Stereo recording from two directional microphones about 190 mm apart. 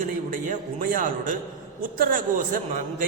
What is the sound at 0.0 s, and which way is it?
A man's voice, 45° right (ahead or behind).